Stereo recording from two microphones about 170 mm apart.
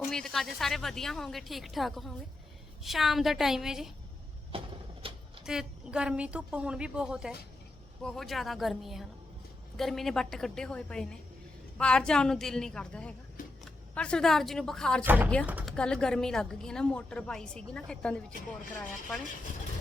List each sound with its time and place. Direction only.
0.1 s a woman's voice: 5° left (ahead or behind)
5.0 s a sound: 30° right (ahead or behind)
5.5 s a woman's voice: 5° right (ahead or behind)
15.0 s speech: 10° right (ahead or behind)
15.7 s a woman's voice: 5° left (ahead or behind)